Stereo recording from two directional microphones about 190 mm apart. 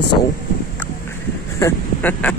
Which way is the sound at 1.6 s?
10° left (ahead or behind).